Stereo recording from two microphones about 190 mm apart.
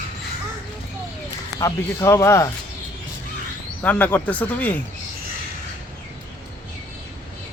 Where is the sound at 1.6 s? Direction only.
15° left (ahead or behind).